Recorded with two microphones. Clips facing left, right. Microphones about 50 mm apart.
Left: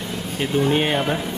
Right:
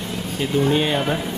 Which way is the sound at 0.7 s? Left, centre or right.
Left.